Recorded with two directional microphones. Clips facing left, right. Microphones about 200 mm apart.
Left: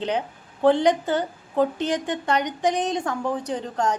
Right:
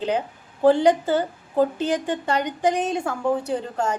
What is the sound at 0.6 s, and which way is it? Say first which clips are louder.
A woman's voice: right 2 dB; 10° right (ahead or behind).